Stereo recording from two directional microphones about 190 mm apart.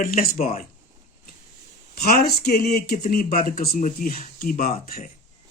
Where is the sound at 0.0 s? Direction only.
45° left (ahead or behind).